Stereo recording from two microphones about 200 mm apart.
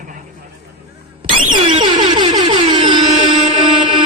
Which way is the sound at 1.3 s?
25° right (ahead or behind).